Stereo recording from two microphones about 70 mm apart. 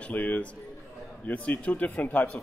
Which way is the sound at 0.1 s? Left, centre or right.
Centre.